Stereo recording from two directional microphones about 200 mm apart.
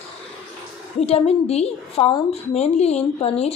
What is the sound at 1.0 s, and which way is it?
A woman's voice, 30° left (ahead or behind).